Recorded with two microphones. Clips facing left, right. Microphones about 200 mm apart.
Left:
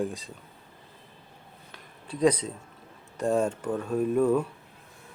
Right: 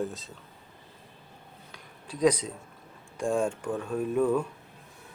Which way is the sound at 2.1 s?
10° right (ahead or behind).